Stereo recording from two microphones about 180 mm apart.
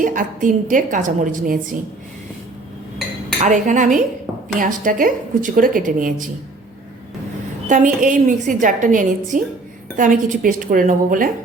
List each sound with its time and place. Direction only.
0.0 s a woman's voice: 45° right (ahead or behind)
3.4 s a woman's voice: 45° right (ahead or behind)
7.7 s a woman's voice: 45° right (ahead or behind)